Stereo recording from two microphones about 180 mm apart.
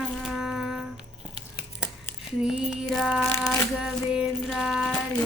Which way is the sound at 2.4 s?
5° right (ahead or behind).